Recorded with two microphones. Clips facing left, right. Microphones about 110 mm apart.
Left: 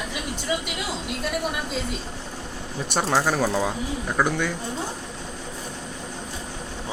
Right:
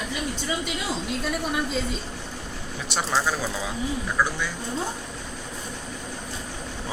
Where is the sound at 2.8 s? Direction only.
50° left (ahead or behind).